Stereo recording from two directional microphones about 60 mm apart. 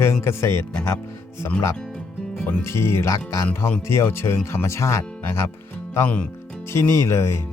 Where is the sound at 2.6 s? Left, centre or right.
Left.